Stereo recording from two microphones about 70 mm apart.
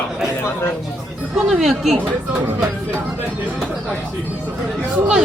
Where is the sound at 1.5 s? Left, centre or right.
Centre.